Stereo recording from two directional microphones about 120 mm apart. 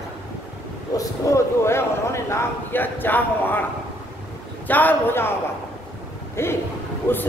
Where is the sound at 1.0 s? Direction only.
25° left (ahead or behind).